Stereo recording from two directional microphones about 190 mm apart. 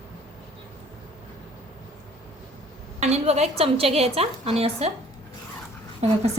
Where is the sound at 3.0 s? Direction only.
35° right (ahead or behind).